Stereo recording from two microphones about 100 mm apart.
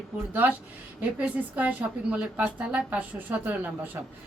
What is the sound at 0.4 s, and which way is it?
A woman's voice, 15° right (ahead or behind).